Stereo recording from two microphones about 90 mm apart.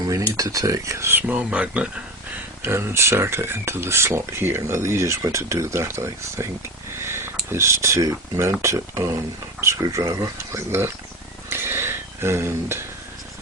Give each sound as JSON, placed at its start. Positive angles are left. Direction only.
{"t": 0.3, "sound": "speech", "side_deg": -40}
{"t": 1.3, "sound": "speech", "side_deg": -10}
{"t": 2.6, "sound": "speech", "side_deg": -25}
{"t": 7.0, "sound": "a sound", "side_deg": -30}
{"t": 7.5, "sound": "speech", "side_deg": -30}
{"t": 11.4, "sound": "a sound", "side_deg": -25}